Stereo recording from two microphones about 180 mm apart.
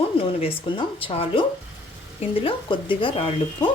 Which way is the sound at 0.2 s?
30° left (ahead or behind).